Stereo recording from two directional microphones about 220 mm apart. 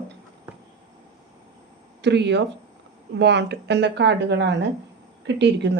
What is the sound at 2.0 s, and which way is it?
A woman's voice, 50° right (ahead or behind).